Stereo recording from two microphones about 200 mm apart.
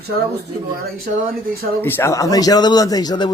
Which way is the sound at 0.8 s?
50° right (ahead or behind).